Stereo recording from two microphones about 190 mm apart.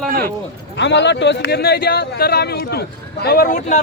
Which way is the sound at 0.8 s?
70° left (ahead or behind).